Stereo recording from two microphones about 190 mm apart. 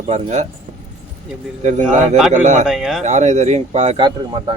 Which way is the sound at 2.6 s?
5° right (ahead or behind).